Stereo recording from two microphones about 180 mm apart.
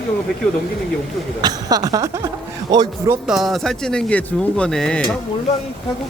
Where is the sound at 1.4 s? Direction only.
20° right (ahead or behind).